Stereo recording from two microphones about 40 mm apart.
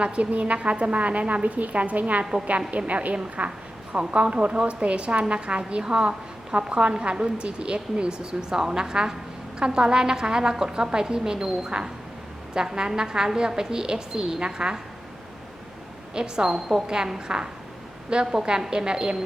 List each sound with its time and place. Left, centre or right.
0.0 s a woman's voice: right; by 14.8 s centre
16.1 s a woman's voice: centre